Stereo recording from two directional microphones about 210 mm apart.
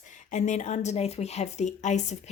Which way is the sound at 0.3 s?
35° left (ahead or behind).